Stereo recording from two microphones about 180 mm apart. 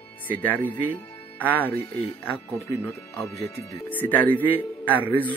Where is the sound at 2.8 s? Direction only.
15° left (ahead or behind).